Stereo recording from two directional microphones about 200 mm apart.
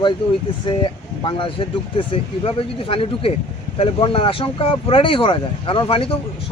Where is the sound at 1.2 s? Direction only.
25° left (ahead or behind).